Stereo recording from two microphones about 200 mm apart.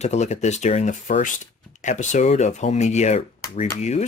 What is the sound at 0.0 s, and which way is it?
Speech, 35° left (ahead or behind).